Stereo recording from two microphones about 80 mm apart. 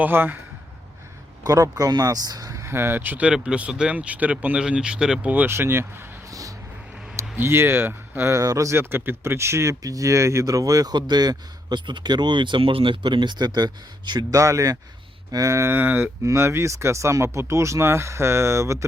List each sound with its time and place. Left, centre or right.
0.0 s speech: right
1.5 s speech: right; by 5.3 s centre
5.3 s speech: right
7.3 s speech: right
8.4 s speech: right
14.3 s speech: right